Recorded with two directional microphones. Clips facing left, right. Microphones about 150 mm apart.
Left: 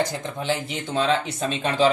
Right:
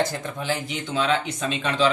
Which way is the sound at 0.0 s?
20° left (ahead or behind).